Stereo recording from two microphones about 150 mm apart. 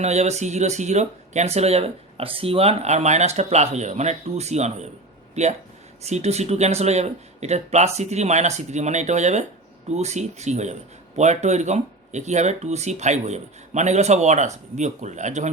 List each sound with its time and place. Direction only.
0.0 s speech: 45° right (ahead or behind)